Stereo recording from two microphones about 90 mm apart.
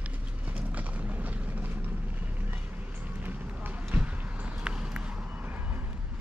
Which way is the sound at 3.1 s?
20° right (ahead or behind).